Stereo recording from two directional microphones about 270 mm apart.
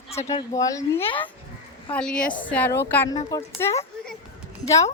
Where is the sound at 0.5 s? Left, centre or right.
Centre.